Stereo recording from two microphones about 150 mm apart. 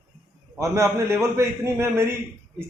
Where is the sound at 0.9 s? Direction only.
20° right (ahead or behind).